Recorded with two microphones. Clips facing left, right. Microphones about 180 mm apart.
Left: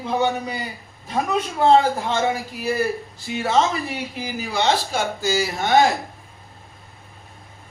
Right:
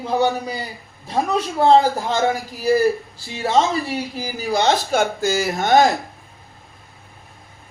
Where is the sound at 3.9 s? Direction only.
35° right (ahead or behind).